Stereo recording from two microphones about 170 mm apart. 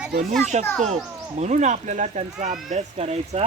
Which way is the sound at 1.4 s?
45° right (ahead or behind).